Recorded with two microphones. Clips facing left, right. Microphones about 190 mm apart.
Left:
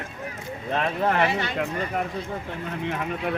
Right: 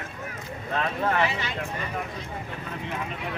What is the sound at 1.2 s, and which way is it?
Speech, 55° left (ahead or behind).